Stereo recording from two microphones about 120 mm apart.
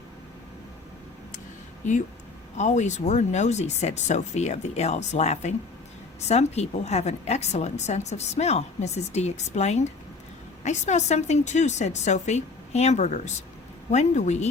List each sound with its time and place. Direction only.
2.6 s a woman's voice: 75° left (ahead or behind)